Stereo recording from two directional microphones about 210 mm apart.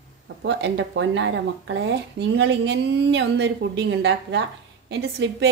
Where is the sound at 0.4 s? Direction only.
55° right (ahead or behind).